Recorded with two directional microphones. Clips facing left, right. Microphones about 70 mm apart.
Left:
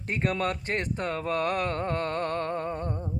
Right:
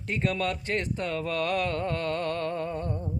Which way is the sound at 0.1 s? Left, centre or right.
Left.